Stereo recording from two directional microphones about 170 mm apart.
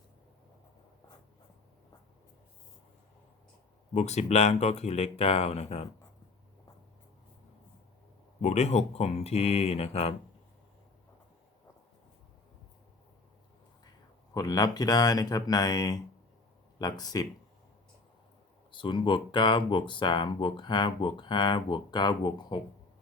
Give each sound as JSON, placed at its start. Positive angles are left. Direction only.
{"t": 3.9, "sound": "speech", "side_deg": 40}
{"t": 8.4, "sound": "speech", "side_deg": 40}
{"t": 14.3, "sound": "speech", "side_deg": 20}
{"t": 18.7, "sound": "speech", "side_deg": 30}